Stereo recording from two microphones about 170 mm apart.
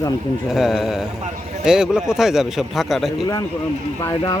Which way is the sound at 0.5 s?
Centre (ahead or behind).